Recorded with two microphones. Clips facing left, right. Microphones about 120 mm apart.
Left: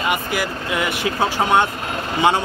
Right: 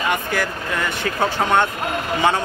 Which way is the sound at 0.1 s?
10° left (ahead or behind).